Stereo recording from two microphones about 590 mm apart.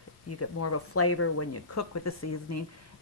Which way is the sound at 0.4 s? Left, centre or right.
Left.